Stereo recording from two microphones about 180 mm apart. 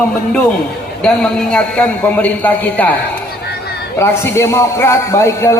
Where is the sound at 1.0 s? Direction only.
5° left (ahead or behind).